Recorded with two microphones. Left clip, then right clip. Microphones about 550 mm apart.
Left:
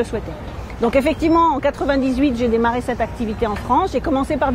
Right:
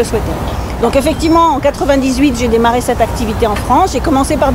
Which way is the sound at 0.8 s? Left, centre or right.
Left.